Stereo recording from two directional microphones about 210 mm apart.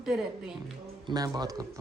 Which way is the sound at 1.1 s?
20° right (ahead or behind).